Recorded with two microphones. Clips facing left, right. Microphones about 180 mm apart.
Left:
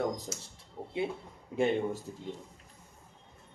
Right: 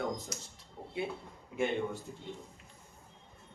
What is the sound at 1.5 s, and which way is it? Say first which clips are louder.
Speech: left 4 dB; 35° left (ahead or behind).